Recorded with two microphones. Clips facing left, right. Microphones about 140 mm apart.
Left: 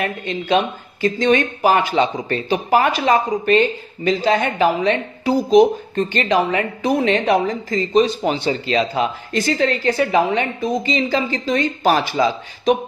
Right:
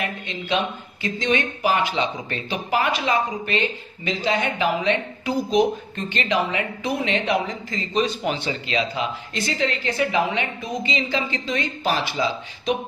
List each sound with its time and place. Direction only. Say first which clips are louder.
1.0 s speech: left 7 dB; 45° left (ahead or behind)